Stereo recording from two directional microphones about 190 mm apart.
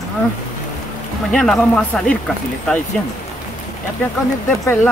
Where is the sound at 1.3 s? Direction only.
5° left (ahead or behind).